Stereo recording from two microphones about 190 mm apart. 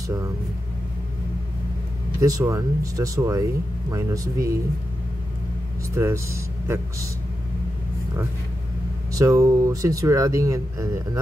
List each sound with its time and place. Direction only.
2.1 s speech: 15° right (ahead or behind)
5.9 s speech: 15° right (ahead or behind)
9.1 s speech: 15° right (ahead or behind)